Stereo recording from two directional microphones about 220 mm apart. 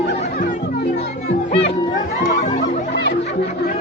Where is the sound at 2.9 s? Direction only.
50° left (ahead or behind).